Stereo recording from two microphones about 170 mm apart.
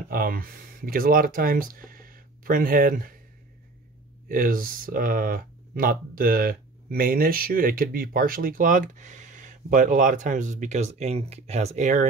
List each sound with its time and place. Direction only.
0.1 s speech: 60° right (ahead or behind)
4.3 s speech: 55° right (ahead or behind)